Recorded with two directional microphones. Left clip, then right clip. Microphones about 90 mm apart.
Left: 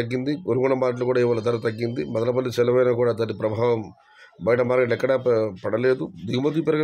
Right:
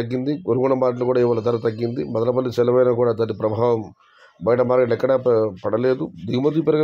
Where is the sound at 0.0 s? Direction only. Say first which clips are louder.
Right 2 dB; 35° right (ahead or behind).